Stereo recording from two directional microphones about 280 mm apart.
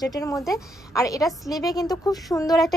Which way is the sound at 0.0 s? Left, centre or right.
Centre.